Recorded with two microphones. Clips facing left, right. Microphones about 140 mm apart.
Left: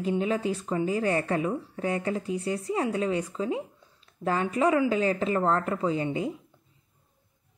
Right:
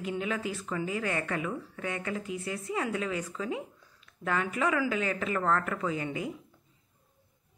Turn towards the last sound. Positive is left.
turn(degrees=30)  # may be behind; listen again after turning